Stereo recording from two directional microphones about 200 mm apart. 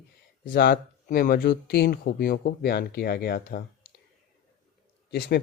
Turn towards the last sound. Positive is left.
turn(degrees=55)  # may be behind; listen again after turning